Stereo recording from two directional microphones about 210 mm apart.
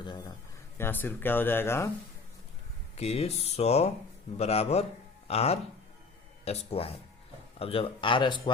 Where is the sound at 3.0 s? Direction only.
30° left (ahead or behind).